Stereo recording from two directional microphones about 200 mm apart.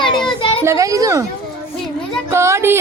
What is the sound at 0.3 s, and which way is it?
Children playing, 25° left (ahead or behind).